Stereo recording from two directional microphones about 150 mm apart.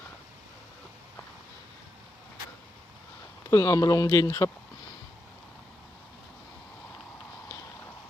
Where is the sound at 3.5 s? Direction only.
25° left (ahead or behind).